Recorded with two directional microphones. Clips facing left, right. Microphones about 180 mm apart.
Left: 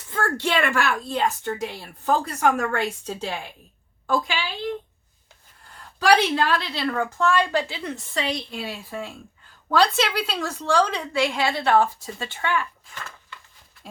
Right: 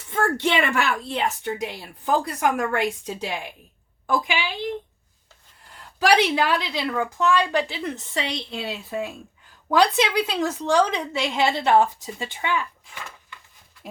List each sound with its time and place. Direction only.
0.1 s a woman's voice: 20° right (ahead or behind)
6.1 s a woman's voice: 15° right (ahead or behind)